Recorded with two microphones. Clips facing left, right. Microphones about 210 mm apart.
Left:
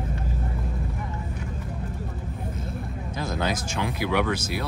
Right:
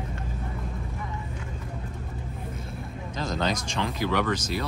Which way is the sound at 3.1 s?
10° left (ahead or behind).